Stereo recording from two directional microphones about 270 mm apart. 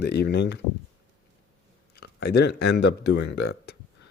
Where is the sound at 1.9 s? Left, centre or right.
Left.